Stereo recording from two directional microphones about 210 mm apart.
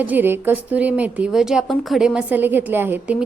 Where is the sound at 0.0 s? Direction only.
10° right (ahead or behind).